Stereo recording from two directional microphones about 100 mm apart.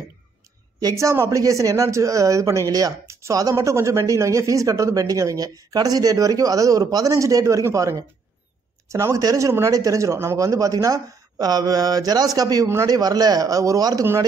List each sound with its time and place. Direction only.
0.7 s speech: 35° right (ahead or behind)